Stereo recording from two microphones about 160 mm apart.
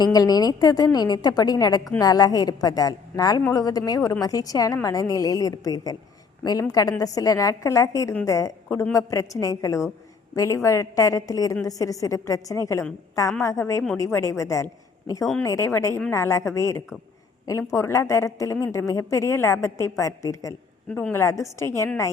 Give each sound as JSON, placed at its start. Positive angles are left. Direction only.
{"t": 0.0, "sound": "a woman's voice", "side_deg": 25}